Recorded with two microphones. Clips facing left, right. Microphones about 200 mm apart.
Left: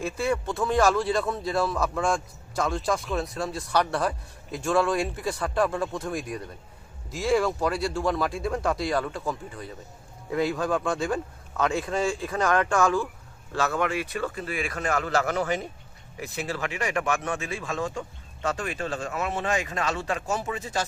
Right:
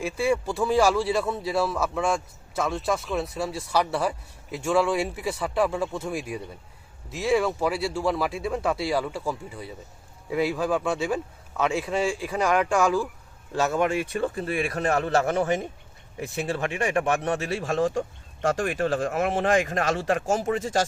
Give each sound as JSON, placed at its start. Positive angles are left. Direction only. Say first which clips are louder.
{"t": 0.0, "sound": "a man's voice", "louder": "right 2 dB", "side_deg": -10}